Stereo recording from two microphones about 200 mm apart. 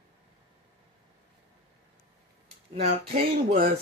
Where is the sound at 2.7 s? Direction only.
30° right (ahead or behind).